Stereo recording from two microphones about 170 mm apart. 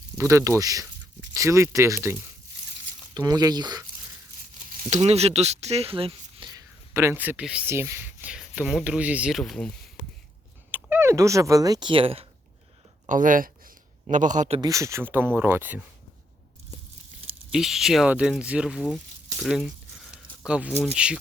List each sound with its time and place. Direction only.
0.2 s speech: 15° right (ahead or behind)
3.2 s speech: 25° right (ahead or behind)
4.9 s speech: 40° right (ahead or behind); by 9.7 s 5° left (ahead or behind)
10.7 s speech: 10° right (ahead or behind); by 12.2 s 30° right (ahead or behind)
13.1 s a man's voice: 50° right (ahead or behind)
14.6 s speech: 20° right (ahead or behind)
17.5 s speech: 5° right (ahead or behind)
19.4 s a sound: centre (ahead or behind)
20.8 s speech: 5° right (ahead or behind)